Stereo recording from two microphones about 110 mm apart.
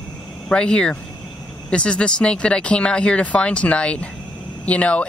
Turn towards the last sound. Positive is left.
turn(degrees=10)  # may be behind; listen again after turning